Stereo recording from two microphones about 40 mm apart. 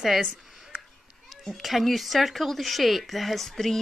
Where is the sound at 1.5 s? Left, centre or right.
Centre.